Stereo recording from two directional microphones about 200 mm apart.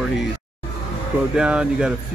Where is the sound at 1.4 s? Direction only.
5° right (ahead or behind).